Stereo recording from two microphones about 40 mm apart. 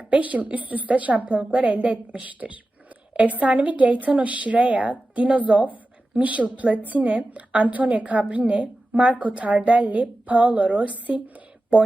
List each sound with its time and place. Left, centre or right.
0.1 s a woman's voice: right
3.1 s a woman's voice: right